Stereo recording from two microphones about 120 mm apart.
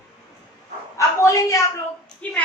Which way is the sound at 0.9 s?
25° left (ahead or behind).